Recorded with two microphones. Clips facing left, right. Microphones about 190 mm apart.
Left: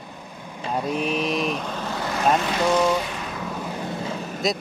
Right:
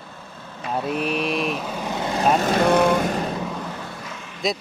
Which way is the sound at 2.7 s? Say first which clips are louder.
Right 1 dB; 55° right (ahead or behind).